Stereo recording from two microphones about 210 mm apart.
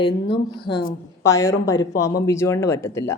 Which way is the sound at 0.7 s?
20° left (ahead or behind).